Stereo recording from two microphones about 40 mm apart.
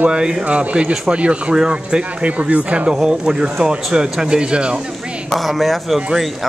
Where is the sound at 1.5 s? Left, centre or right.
Centre.